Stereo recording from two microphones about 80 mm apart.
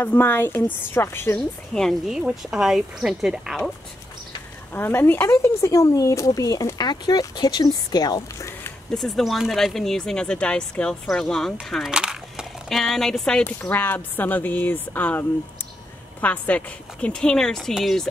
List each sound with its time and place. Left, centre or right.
0.0 s a woman's voice: left
1.3 s speech: centre
4.7 s speech: left
8.4 s a sound: left
8.9 s speech: centre
11.7 s speech: centre
12.6 s speech: centre
13.6 s a woman's voice: left; by 18.0 s centre